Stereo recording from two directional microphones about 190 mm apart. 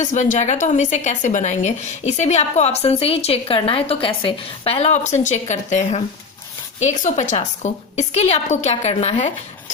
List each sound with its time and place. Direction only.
0.0 s a woman's voice: 40° left (ahead or behind)